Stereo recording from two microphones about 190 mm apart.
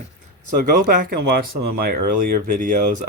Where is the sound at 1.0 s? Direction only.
55° right (ahead or behind).